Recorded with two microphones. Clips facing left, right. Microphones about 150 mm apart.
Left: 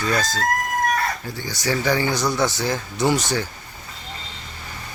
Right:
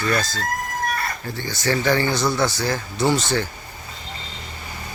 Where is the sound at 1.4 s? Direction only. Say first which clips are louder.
Right 3 dB; 10° left (ahead or behind).